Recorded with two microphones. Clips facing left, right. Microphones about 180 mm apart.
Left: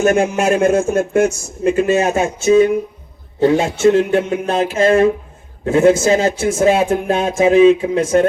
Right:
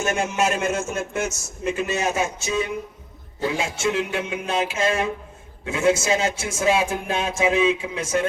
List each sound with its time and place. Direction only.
0.0 s speech: 55° left (ahead or behind)